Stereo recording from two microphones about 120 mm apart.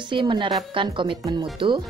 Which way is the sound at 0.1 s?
40° right (ahead or behind).